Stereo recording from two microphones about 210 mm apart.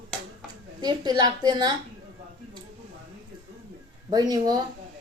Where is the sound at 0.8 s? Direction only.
20° right (ahead or behind).